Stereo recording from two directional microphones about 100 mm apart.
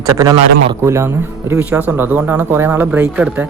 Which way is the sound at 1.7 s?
15° right (ahead or behind).